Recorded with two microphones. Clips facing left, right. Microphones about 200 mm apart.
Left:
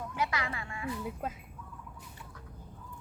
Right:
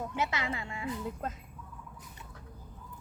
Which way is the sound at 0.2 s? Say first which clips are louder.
Even; 25° right (ahead or behind).